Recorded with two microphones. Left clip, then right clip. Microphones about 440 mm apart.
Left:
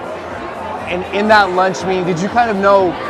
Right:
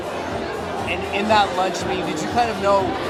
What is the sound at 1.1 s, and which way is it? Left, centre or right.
Speech, left.